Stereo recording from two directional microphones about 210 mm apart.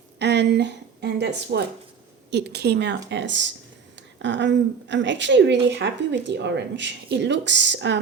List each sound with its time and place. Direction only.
0.2 s a woman's voice: 55° right (ahead or behind)